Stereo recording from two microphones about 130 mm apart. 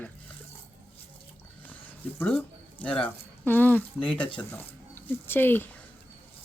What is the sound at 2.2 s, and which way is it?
Speech, 10° left (ahead or behind).